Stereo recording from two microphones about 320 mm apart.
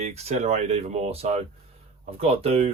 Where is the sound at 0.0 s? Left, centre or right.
Centre.